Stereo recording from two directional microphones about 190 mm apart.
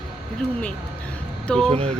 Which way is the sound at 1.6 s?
30° right (ahead or behind).